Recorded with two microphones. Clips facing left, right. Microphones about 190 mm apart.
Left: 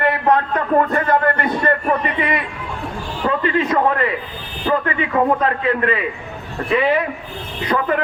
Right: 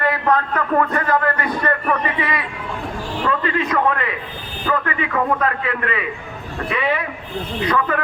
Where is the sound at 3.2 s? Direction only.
30° left (ahead or behind).